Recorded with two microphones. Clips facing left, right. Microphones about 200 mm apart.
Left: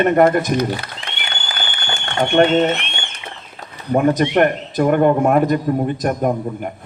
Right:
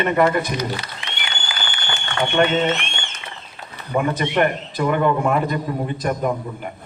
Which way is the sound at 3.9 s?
45° left (ahead or behind).